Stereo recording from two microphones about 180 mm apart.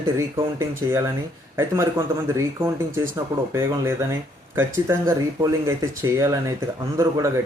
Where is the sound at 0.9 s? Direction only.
15° right (ahead or behind).